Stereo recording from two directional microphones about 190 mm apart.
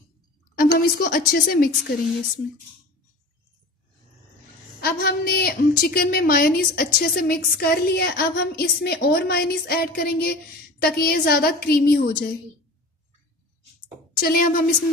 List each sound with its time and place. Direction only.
0.6 s a woman's voice: 50° left (ahead or behind)
4.7 s a woman's voice: 55° left (ahead or behind)
14.2 s a woman's voice: 50° left (ahead or behind)